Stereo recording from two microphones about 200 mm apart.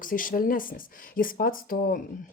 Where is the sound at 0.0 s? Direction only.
45° left (ahead or behind).